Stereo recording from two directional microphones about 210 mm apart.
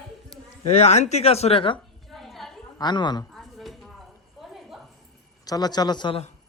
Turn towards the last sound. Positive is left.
turn(degrees=25)  # may be behind; listen again after turning